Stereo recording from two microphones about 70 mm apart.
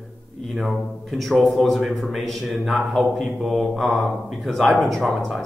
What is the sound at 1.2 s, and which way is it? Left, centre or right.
Speech, centre.